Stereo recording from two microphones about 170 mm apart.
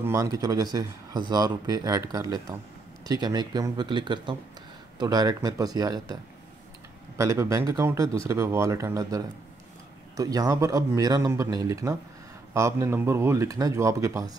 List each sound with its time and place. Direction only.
0.0 s speech: 20° right (ahead or behind)
7.2 s speech: 20° right (ahead or behind)